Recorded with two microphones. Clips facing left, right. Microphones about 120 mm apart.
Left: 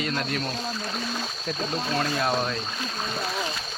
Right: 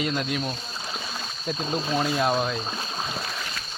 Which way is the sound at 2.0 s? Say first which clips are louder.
Right 2 dB; 10° right (ahead or behind).